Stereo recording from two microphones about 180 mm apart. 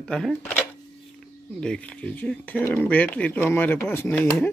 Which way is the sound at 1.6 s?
5° left (ahead or behind).